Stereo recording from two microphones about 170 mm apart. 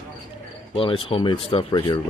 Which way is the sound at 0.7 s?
30° left (ahead or behind).